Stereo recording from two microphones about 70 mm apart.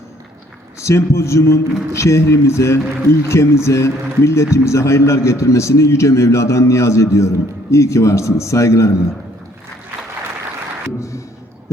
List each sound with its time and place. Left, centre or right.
0.8 s a man's voice: left